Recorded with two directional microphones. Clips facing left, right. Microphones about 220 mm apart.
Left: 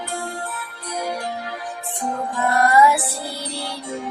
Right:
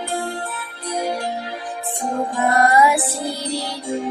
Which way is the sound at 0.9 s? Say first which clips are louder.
Right 3 dB; 30° right (ahead or behind).